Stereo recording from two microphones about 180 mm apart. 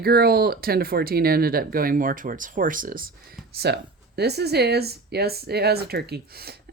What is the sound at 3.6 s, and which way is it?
Speech, 65° right (ahead or behind).